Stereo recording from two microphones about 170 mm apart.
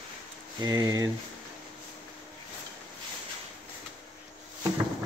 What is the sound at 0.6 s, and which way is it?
Speech, 20° right (ahead or behind).